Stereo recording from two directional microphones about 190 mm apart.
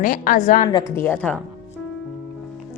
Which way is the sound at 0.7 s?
15° left (ahead or behind).